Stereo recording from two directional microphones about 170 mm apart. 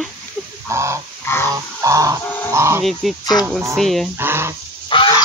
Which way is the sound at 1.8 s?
20° right (ahead or behind).